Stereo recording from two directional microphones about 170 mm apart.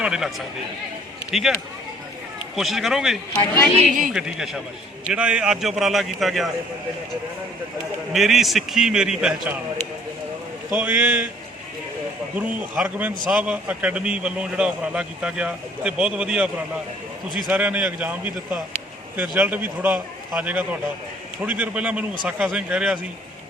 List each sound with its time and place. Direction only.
0.0 s a man's voice: 5° right (ahead or behind)
2.6 s a man's voice: centre (ahead or behind)
3.8 s a man's voice: 50° right (ahead or behind)
4.1 s a man's voice: 5° right (ahead or behind)
8.1 s a man's voice: centre (ahead or behind)
10.7 s a man's voice: 5° right (ahead or behind)
12.4 s a man's voice: 10° right (ahead or behind)